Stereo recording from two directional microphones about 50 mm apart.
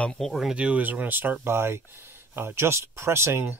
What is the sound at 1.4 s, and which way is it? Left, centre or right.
Speech, right.